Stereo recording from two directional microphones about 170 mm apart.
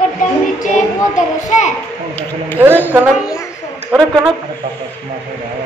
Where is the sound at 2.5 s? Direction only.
10° right (ahead or behind).